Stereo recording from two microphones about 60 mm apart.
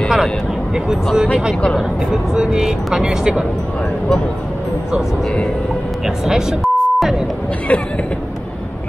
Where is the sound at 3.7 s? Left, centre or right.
Centre.